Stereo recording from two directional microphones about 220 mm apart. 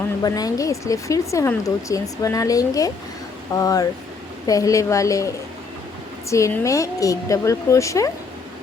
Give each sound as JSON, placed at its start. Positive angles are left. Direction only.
{"t": 0.2, "sound": "speech", "side_deg": 15}
{"t": 6.3, "sound": "speech", "side_deg": 15}